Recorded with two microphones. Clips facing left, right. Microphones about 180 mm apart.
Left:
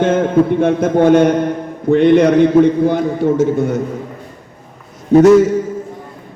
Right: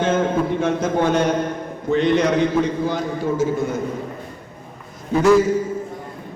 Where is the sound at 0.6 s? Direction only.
55° left (ahead or behind).